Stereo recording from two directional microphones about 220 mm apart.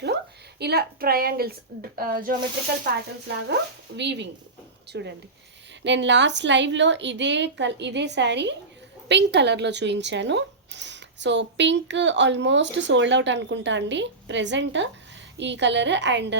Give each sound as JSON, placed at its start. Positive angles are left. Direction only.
{"t": 0.6, "sound": "speech", "side_deg": -45}
{"t": 3.5, "sound": "speech", "side_deg": -50}